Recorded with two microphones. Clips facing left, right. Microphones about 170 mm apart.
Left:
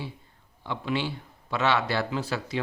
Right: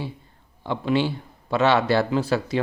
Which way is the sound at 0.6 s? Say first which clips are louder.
Right 7 dB; 35° right (ahead or behind).